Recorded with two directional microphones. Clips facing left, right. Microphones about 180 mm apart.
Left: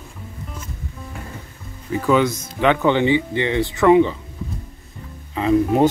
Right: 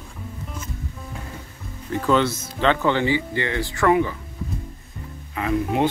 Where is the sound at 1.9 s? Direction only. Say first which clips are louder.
Left 2 dB; 5° left (ahead or behind).